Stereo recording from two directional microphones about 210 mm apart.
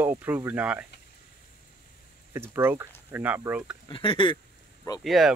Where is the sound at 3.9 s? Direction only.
25° left (ahead or behind).